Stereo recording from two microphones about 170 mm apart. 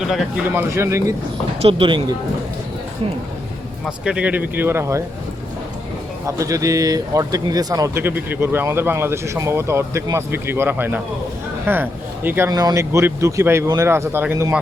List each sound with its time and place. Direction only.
0.0 s speech: centre (ahead or behind)
1.6 s speech: 30° right (ahead or behind)
3.8 s speech: 5° right (ahead or behind)
6.2 s speech: 20° right (ahead or behind)